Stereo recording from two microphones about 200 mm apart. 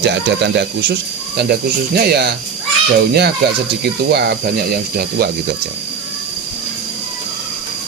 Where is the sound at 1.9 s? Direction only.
55° right (ahead or behind).